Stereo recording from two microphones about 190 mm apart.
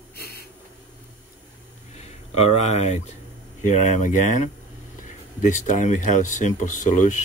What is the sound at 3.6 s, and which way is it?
Speech, 40° left (ahead or behind).